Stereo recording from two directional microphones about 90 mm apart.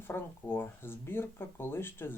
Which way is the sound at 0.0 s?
25° left (ahead or behind).